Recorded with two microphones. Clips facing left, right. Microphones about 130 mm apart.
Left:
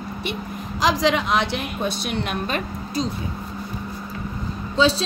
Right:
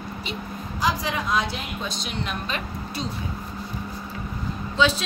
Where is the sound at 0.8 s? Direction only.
85° left; by 2.6 s 55° left (ahead or behind).